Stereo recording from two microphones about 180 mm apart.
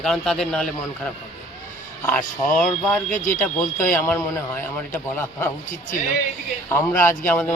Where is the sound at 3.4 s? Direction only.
10° left (ahead or behind).